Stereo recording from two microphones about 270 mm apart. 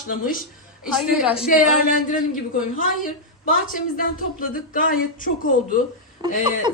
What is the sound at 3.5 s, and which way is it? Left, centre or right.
Speech, left.